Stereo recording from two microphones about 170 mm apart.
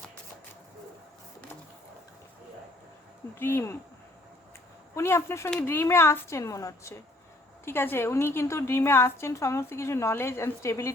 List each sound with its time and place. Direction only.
3.3 s a woman's voice: 15° left (ahead or behind)
4.9 s a woman's voice: 15° left (ahead or behind)